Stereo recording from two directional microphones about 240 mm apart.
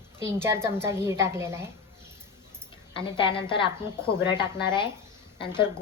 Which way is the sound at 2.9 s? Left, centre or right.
Left.